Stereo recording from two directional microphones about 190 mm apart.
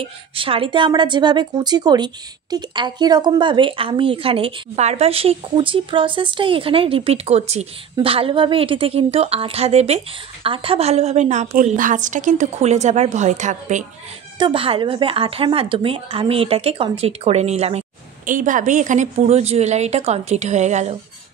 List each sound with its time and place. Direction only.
0.0 s speech: 30° right (ahead or behind)
14.4 s speech: 30° right (ahead or behind)